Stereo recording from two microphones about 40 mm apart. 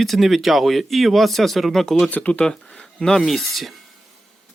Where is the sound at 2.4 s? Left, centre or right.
Centre.